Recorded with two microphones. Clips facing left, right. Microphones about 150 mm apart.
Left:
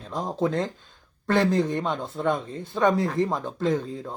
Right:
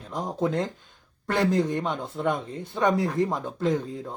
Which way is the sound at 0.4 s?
15° right (ahead or behind).